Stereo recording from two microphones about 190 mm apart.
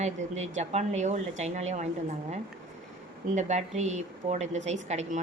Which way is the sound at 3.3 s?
35° right (ahead or behind).